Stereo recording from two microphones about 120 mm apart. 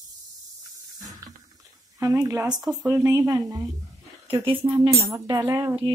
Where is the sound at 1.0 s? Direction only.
30° right (ahead or behind).